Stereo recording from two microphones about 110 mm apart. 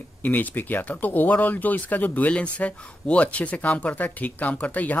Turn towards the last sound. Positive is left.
turn(degrees=15)  # may be behind; listen again after turning